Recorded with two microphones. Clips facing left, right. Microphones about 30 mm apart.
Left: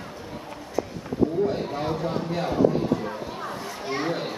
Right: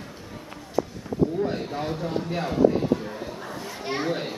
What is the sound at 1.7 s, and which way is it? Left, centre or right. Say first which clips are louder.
Speech: left 2 dB; centre.